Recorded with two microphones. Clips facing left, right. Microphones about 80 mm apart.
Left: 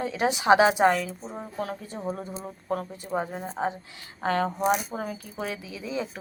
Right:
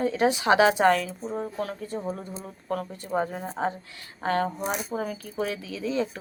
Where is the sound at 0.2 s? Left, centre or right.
Centre.